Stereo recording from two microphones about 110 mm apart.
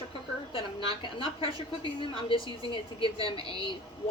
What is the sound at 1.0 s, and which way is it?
A woman's voice, 50° left (ahead or behind).